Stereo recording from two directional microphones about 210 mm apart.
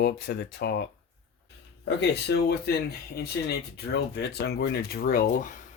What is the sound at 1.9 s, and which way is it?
Speech, 55° left (ahead or behind).